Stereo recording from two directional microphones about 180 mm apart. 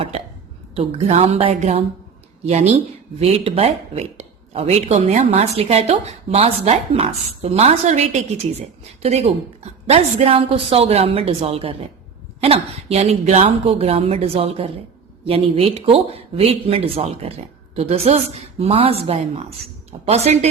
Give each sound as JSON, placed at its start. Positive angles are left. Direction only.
{"t": 0.8, "sound": "speech", "side_deg": -35}